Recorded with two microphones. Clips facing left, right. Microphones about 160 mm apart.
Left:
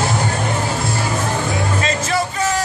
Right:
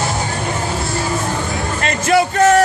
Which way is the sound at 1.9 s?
60° right (ahead or behind).